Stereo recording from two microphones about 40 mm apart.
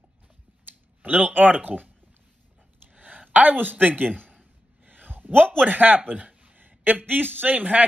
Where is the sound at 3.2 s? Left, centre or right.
Right.